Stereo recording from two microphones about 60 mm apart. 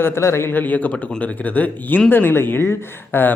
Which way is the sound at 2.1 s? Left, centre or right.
Left.